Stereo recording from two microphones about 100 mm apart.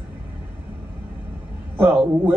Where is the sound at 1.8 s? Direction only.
20° right (ahead or behind).